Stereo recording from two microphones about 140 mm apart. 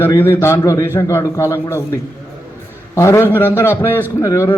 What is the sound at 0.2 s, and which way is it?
A man's voice, 15° left (ahead or behind).